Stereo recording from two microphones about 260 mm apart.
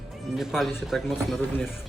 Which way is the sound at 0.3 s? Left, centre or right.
Centre.